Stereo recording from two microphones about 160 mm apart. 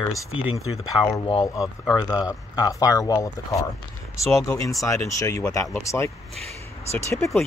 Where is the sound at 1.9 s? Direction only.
25° left (ahead or behind).